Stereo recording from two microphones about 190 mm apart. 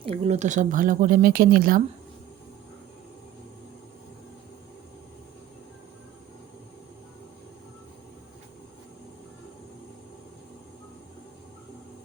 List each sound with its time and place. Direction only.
0.0 s speech: 30° right (ahead or behind); by 1.8 s 50° right (ahead or behind)